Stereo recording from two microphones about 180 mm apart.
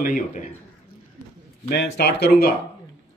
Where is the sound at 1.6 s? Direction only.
65° left (ahead or behind).